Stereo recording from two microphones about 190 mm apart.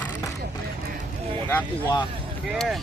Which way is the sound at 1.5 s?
15° left (ahead or behind).